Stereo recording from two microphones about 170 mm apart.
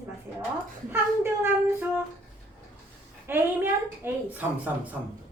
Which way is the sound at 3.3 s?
10° right (ahead or behind).